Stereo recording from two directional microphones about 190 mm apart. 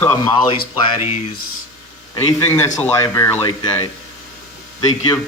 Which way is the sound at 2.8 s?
15° left (ahead or behind).